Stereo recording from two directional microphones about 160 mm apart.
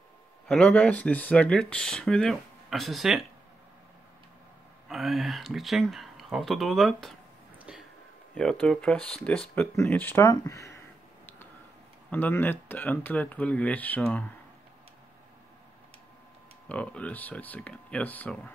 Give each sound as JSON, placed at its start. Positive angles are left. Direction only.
{"t": 0.5, "sound": "speech", "side_deg": 5}
{"t": 4.8, "sound": "speech", "side_deg": 0}
{"t": 7.5, "sound": "a sound", "side_deg": -5}
{"t": 8.4, "sound": "speech", "side_deg": 5}
{"t": 12.1, "sound": "speech", "side_deg": 10}
{"t": 16.6, "sound": "speech", "side_deg": 5}